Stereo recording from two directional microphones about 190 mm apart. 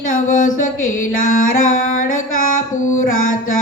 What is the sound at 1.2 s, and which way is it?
Music, 45° left (ahead or behind).